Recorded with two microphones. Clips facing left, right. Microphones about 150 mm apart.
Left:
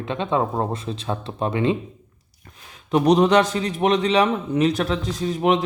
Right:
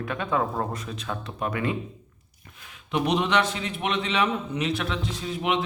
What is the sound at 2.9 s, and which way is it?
A man's voice, 40° left (ahead or behind).